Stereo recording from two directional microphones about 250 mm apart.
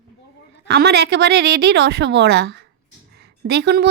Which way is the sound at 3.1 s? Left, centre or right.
Right.